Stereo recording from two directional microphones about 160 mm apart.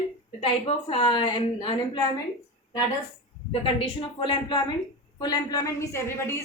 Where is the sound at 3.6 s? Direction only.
30° left (ahead or behind).